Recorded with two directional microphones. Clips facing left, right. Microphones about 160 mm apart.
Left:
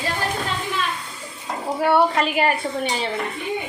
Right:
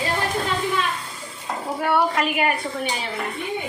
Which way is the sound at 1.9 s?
30° left (ahead or behind).